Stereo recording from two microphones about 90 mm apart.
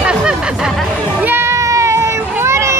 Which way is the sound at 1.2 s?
25° right (ahead or behind).